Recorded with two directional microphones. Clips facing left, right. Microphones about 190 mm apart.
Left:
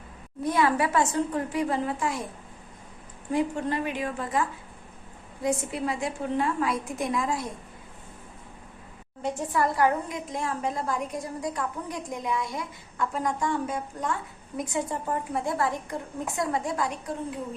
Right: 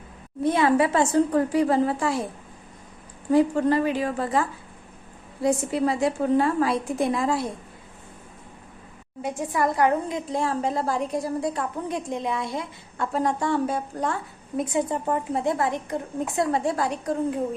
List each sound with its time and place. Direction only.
0.4 s a woman's voice: 25° right (ahead or behind)
3.3 s a woman's voice: 35° right (ahead or behind)
9.2 s a woman's voice: 15° right (ahead or behind); by 14.6 s 35° right (ahead or behind)
14.6 s a woman's voice: 25° right (ahead or behind)